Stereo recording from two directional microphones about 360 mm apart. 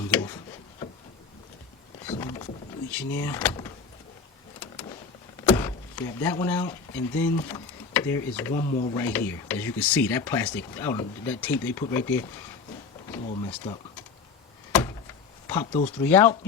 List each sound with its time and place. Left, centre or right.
0.1 s a sound: centre
2.0 s vehicle: centre
2.9 s speech: centre
5.5 s speech: centre
9.0 s speech: centre
13.1 s a sound: centre
14.7 s door: centre
15.4 s speech: centre